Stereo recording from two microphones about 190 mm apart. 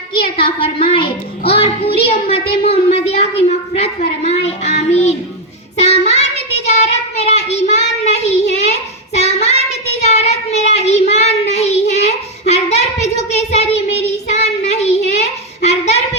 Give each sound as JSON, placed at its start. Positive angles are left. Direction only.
{"t": 0.1, "sound": "a woman's voice", "side_deg": 30}
{"t": 5.7, "sound": "child singing", "side_deg": 35}